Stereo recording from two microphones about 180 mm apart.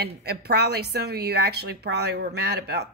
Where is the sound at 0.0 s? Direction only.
65° right (ahead or behind).